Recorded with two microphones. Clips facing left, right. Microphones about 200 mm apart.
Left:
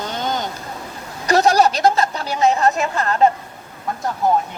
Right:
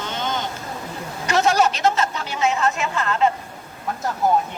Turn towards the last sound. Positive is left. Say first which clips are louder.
# left 1 dB
turn(degrees=0)  # may be behind; listen again after turning